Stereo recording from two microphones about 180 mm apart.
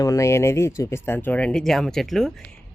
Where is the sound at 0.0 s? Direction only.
15° left (ahead or behind).